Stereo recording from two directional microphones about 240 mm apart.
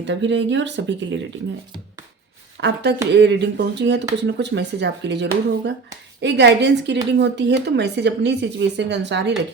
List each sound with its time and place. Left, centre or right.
0.0 s a woman's voice: right
2.6 s a woman's voice: right